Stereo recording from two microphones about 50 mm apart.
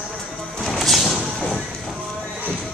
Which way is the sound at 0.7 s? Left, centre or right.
Centre.